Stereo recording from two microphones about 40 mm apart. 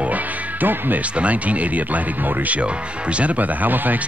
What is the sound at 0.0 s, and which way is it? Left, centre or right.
Music, right.